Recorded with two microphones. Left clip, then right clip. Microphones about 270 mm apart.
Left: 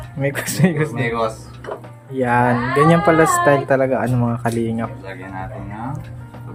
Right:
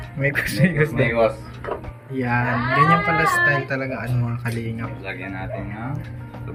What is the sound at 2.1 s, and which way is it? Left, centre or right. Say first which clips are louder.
Speech: left 6 dB; centre.